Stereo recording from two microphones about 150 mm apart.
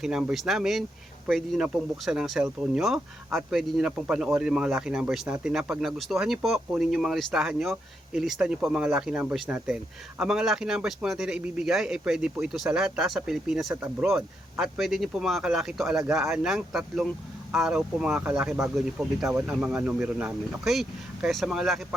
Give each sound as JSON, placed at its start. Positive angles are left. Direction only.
{"t": 0.0, "sound": "speech", "side_deg": -5}
{"t": 14.1, "sound": "speech", "side_deg": -15}
{"t": 14.6, "sound": "speech", "side_deg": 0}